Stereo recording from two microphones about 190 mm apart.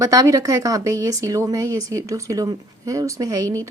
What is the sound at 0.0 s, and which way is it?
A woman's voice, 20° right (ahead or behind).